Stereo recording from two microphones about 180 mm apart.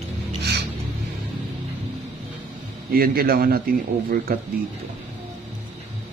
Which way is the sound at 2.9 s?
55° right (ahead or behind).